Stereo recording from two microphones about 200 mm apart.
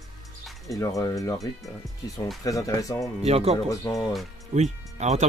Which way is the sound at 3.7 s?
15° left (ahead or behind).